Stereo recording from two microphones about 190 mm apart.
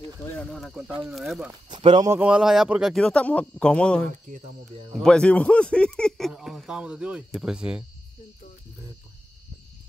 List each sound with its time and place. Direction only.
0.4 s speech: centre (ahead or behind)
1.7 s speech: 25° right (ahead or behind)
2.0 s speech: 5° right (ahead or behind)